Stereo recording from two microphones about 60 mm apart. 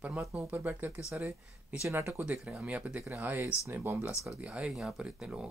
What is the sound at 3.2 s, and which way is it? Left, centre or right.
Speech, right.